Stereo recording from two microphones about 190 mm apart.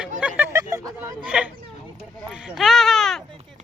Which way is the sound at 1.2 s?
5° right (ahead or behind).